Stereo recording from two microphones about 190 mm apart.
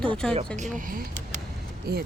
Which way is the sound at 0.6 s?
45° right (ahead or behind).